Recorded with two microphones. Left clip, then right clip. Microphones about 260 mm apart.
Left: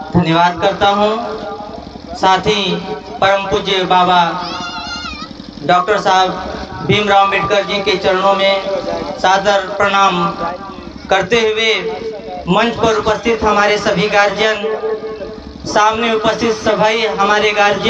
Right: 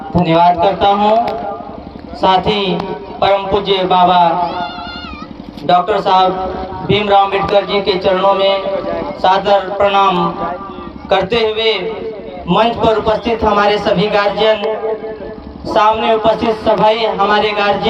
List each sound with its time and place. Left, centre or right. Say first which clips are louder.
0.2 s a man's voice: right 3 dB; left
2.2 s a man's voice: even; left
5.6 s a man's voice: even; left
8.9 s vehicle: right 1 dB; centre
9.2 s a man's voice: right 1 dB; left
15.6 s a man's voice: right 1 dB; left